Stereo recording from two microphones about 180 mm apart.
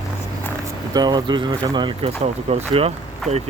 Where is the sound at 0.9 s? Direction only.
25° right (ahead or behind).